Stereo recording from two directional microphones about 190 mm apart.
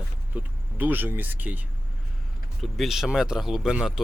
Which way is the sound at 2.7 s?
Centre (ahead or behind).